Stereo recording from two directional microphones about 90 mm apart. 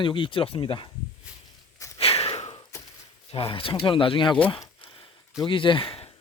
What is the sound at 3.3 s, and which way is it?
Speech, 90° left.